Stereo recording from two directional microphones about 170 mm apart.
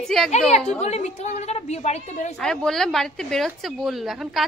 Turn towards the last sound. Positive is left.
turn(degrees=0)  # may be behind; listen again after turning